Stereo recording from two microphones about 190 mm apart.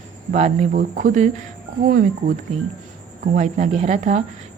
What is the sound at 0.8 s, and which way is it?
Speech, 45° right (ahead or behind).